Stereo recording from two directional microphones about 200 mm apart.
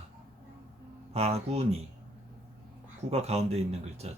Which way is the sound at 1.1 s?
30° right (ahead or behind).